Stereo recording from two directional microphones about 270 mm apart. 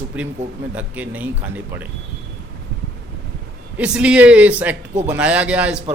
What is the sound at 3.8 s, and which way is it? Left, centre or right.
A man's voice, centre.